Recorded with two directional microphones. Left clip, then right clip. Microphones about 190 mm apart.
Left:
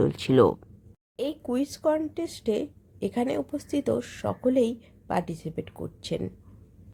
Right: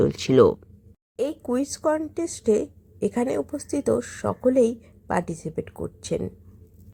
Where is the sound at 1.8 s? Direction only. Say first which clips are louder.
Even; 15° right (ahead or behind).